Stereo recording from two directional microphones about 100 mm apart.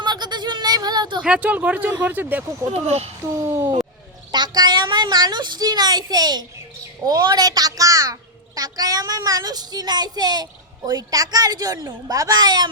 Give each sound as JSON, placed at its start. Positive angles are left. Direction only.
{"t": 0.0, "sound": "a sound", "side_deg": -45}
{"t": 1.2, "sound": "speech", "side_deg": -10}
{"t": 2.8, "sound": "a child's voice", "side_deg": -90}
{"t": 3.4, "sound": "speech", "side_deg": -25}
{"t": 4.3, "sound": "a woman's voice", "side_deg": -45}